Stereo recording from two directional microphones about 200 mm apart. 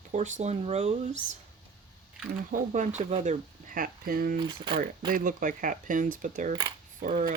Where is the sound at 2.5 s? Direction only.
40° right (ahead or behind).